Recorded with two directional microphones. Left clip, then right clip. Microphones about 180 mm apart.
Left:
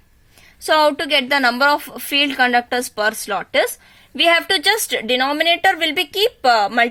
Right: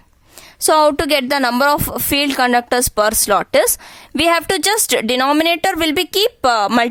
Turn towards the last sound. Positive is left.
turn(degrees=-40)  # may be behind; listen again after turning